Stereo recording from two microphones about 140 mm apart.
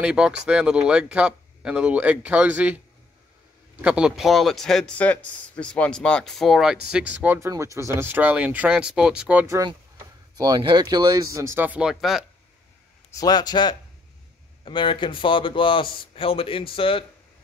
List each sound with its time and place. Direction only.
0.0 s speech: 5° right (ahead or behind)
3.8 s speech: 5° right (ahead or behind)
7.3 s speech: 20° right (ahead or behind)
10.3 s speech: 30° right (ahead or behind); by 12.3 s centre (ahead or behind)
13.1 s a man's voice: 30° left (ahead or behind)